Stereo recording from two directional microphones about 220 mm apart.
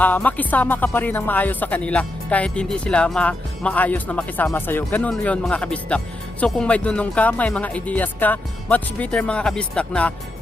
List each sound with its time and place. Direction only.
0.0 s speech: 5° left (ahead or behind)